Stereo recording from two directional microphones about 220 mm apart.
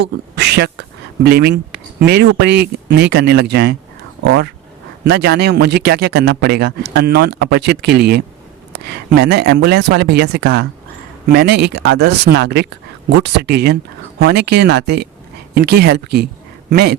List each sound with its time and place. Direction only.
0.0 s speech: 50° right (ahead or behind)
5.0 s speech: 50° right (ahead or behind)